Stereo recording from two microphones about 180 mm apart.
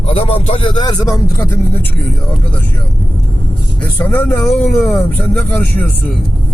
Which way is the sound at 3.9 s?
10° left (ahead or behind).